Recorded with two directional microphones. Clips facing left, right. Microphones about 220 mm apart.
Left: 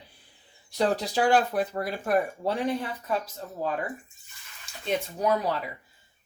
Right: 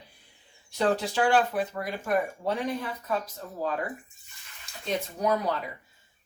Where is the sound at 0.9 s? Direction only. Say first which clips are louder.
Left 3 dB; 40° left (ahead or behind).